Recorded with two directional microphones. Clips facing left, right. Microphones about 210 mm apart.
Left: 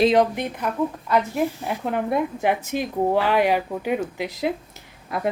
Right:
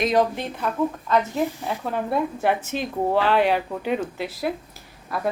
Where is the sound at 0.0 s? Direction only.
20° left (ahead or behind).